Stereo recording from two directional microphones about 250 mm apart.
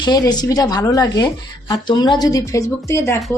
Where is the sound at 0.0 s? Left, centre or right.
Centre.